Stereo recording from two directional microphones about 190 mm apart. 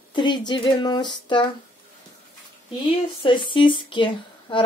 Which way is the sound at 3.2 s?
25° left (ahead or behind).